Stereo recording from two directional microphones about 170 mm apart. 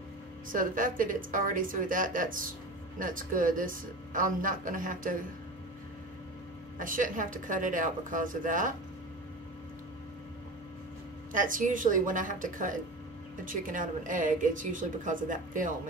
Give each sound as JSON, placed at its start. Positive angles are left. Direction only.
{"t": 0.5, "sound": "a man's voice", "side_deg": -50}
{"t": 6.8, "sound": "a man's voice", "side_deg": -50}
{"t": 11.3, "sound": "a man's voice", "side_deg": -50}